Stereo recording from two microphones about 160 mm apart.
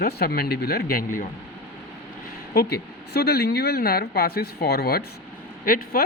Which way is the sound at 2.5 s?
80° left.